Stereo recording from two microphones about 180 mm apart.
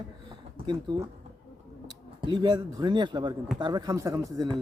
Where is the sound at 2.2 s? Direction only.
25° right (ahead or behind).